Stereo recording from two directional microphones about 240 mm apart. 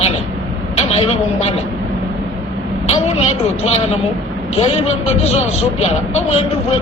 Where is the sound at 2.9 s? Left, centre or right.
Left.